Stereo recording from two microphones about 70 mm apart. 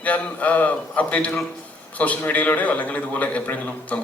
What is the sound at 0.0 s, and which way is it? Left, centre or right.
Speech, left.